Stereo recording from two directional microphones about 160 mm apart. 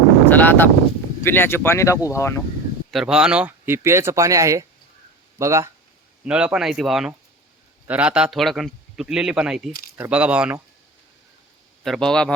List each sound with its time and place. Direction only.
0.3 s speech: 10° left (ahead or behind)
2.9 s speech: 5° right (ahead or behind)
6.2 s a man's voice: 5° right (ahead or behind)
11.8 s a man's voice: centre (ahead or behind)